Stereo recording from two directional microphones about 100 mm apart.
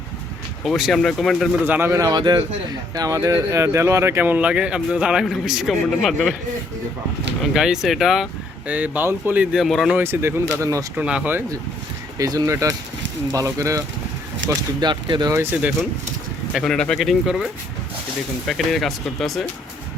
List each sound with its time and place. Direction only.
0.6 s speech: centre (ahead or behind)
1.6 s speech: 20° right (ahead or behind)
1.9 s speech: 35° right (ahead or behind); by 6.3 s 5° left (ahead or behind)
7.5 s speech: 5° right (ahead or behind)
8.6 s speech: 15° right (ahead or behind)
9.6 s speech: centre (ahead or behind)
9.9 s speech: 20° right (ahead or behind)
10.9 s speech: 10° right (ahead or behind)
12.1 s speech: 40° right (ahead or behind)
14.8 s speech: 50° right (ahead or behind)
16.6 s speech: 5° left (ahead or behind)